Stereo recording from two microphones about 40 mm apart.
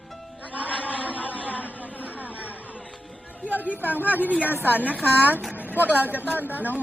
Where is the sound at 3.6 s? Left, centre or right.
Left.